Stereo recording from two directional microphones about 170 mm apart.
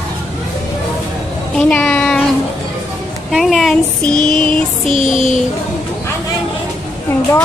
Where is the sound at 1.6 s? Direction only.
10° left (ahead or behind).